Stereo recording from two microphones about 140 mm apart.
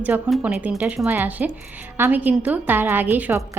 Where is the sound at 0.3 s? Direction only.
5° right (ahead or behind).